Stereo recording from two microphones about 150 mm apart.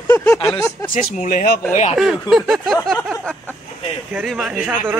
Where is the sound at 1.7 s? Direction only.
55° left (ahead or behind).